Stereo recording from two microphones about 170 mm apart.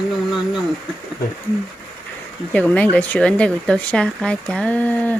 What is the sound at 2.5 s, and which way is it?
Speech, 10° left (ahead or behind).